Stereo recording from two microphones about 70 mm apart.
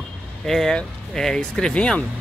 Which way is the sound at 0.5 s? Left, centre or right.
Centre.